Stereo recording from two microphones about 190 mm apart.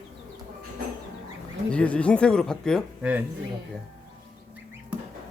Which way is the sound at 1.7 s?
5° left (ahead or behind).